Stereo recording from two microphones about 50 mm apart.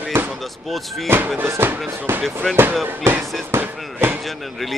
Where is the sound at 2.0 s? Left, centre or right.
Right.